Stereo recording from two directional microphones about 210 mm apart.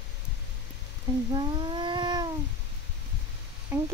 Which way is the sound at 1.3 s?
20° right (ahead or behind).